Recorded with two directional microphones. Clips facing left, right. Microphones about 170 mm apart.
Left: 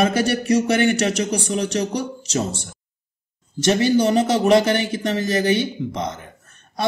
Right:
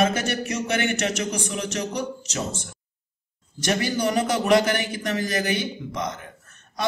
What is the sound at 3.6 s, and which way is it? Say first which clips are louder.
A man's voice: left 7 dB; 25° left (ahead or behind).